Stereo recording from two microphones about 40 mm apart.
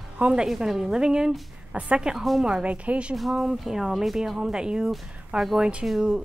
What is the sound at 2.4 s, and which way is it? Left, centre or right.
Speech, centre.